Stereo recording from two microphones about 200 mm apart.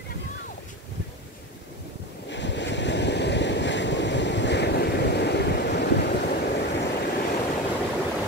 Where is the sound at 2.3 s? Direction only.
65° left (ahead or behind).